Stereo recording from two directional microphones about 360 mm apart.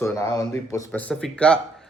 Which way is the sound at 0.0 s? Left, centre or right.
Centre.